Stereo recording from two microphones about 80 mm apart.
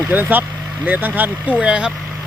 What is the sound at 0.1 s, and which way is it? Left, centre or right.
Speech, right.